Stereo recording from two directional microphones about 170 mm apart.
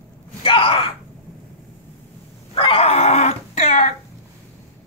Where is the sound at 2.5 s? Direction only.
35° left (ahead or behind).